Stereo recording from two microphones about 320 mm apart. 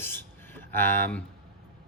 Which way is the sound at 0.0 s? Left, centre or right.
Centre.